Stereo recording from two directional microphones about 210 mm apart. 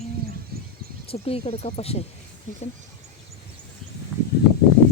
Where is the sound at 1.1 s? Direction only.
30° left (ahead or behind).